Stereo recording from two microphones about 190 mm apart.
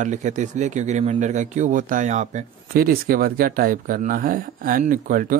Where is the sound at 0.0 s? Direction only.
40° right (ahead or behind).